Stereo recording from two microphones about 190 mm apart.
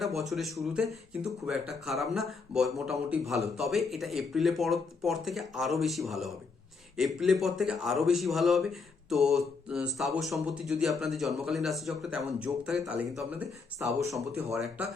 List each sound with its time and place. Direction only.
0.0 s a man's voice: centre (ahead or behind)
14.5 s a man's voice: centre (ahead or behind)